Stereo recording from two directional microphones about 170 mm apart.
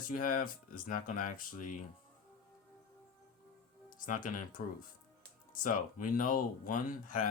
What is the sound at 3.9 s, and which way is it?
Speech, 50° left (ahead or behind).